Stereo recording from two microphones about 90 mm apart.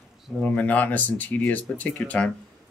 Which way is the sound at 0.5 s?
20° left (ahead or behind).